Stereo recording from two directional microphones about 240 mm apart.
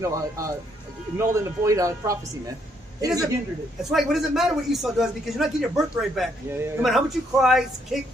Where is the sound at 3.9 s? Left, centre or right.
Centre.